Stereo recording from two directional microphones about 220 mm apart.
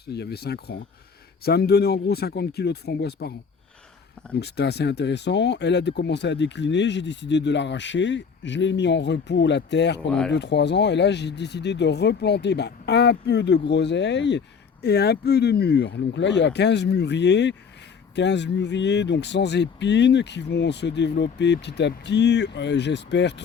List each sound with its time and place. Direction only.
0.1 s speech: 50° left (ahead or behind)
4.4 s speech: 50° left (ahead or behind)
10.1 s speech: centre (ahead or behind)
10.3 s speech: 50° left (ahead or behind)